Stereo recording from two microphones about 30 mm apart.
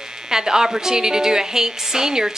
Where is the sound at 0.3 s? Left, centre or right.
Centre.